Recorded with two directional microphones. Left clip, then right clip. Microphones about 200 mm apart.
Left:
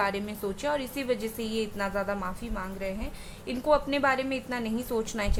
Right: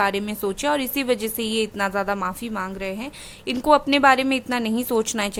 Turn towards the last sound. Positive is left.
turn(degrees=-40)  # may be behind; listen again after turning